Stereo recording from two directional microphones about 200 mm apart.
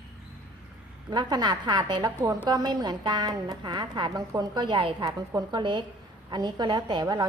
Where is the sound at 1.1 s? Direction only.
20° right (ahead or behind).